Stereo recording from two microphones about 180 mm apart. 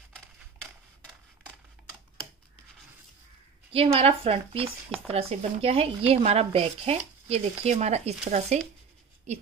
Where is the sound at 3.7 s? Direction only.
30° right (ahead or behind).